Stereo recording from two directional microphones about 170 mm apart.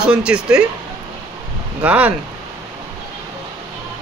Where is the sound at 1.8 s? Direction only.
10° right (ahead or behind).